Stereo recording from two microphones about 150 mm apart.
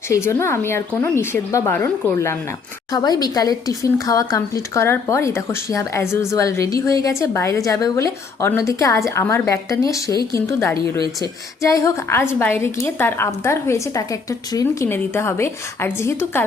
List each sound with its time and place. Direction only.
0.1 s a woman's voice: 20° left (ahead or behind)